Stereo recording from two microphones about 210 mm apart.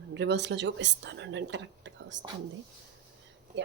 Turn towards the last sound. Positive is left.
turn(degrees=-55)  # may be behind; listen again after turning